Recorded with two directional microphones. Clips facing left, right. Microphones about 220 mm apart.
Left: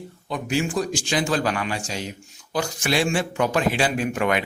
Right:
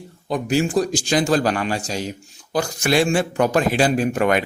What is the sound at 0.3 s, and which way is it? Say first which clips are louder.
A man's voice: right 5 dB; 40° right (ahead or behind).